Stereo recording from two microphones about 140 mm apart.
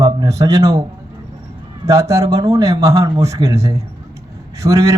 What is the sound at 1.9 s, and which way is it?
Speech, 20° right (ahead or behind).